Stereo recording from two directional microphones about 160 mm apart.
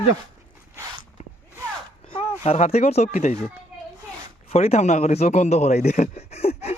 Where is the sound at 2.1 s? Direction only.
35° left (ahead or behind).